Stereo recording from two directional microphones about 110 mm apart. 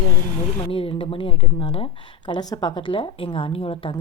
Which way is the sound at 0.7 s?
55° left (ahead or behind).